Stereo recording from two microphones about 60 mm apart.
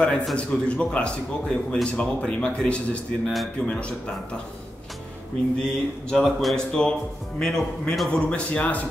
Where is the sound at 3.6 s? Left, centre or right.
Centre.